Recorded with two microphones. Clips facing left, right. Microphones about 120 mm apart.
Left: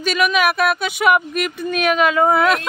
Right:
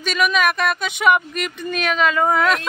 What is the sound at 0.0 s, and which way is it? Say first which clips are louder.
Speech: left 2 dB; 5° left (ahead or behind).